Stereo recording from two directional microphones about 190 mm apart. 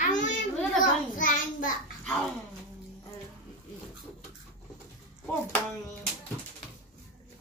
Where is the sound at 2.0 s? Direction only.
Centre (ahead or behind).